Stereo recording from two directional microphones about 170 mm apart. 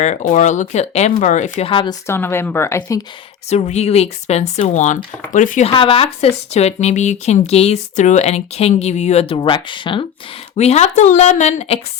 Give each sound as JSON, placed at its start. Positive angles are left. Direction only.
{"t": 0.0, "sound": "speech", "side_deg": 45}
{"t": 2.0, "sound": "speech", "side_deg": 15}
{"t": 3.5, "sound": "speech", "side_deg": 40}
{"t": 5.7, "sound": "speech", "side_deg": 35}
{"t": 10.6, "sound": "speech", "side_deg": 40}